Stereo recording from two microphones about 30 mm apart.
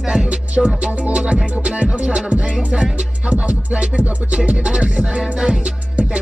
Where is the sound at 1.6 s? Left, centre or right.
Right.